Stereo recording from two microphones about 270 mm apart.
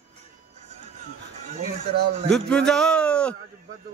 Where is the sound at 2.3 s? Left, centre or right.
Centre.